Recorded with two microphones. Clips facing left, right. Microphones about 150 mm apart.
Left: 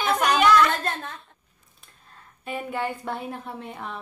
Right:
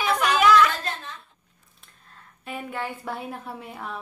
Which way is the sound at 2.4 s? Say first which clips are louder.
Left 3 dB; centre (ahead or behind).